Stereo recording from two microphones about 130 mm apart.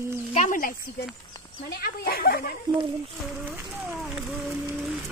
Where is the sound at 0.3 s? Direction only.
75° left (ahead or behind).